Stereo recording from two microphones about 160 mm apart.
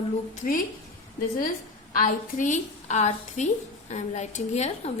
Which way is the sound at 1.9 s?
55° left (ahead or behind).